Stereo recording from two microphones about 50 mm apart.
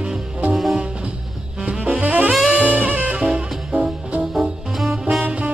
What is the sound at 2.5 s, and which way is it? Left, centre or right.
Saxophone, right.